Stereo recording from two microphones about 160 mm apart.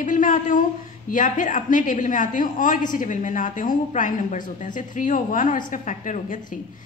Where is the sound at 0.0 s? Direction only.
55° left (ahead or behind).